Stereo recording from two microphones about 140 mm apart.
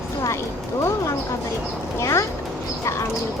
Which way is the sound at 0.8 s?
20° left (ahead or behind).